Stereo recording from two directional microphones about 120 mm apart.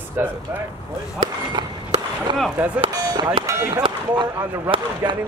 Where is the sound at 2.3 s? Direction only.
40° right (ahead or behind).